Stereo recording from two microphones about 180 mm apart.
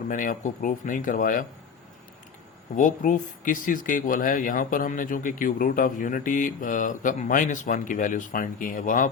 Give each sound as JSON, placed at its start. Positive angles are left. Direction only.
{"t": 0.1, "sound": "speech", "side_deg": 45}
{"t": 2.7, "sound": "speech", "side_deg": 45}